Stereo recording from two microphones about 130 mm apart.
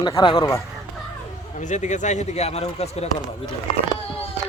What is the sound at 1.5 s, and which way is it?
Speech, 65° left (ahead or behind).